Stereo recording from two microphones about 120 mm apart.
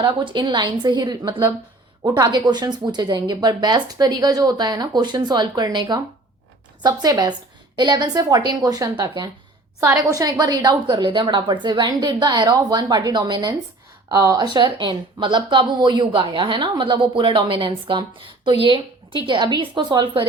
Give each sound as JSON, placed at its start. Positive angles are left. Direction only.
{"t": 0.0, "sound": "speech", "side_deg": -35}